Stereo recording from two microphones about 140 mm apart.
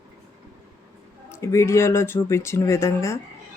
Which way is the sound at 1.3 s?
20° left (ahead or behind).